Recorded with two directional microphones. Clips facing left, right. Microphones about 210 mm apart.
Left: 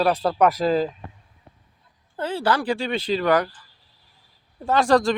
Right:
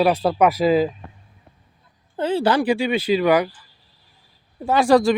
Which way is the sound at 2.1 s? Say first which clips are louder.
Right 4 dB; 20° right (ahead or behind).